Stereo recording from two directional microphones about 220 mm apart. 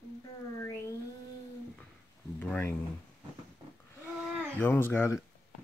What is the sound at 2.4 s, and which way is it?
Speech, 5° left (ahead or behind).